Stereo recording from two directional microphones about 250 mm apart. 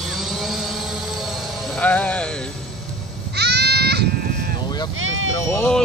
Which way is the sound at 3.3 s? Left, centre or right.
Right.